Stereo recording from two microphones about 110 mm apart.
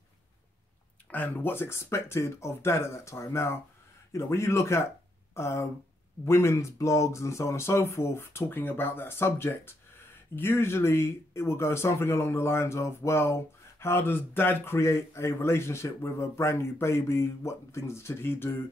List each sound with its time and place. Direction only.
1.1 s speech: 15° left (ahead or behind)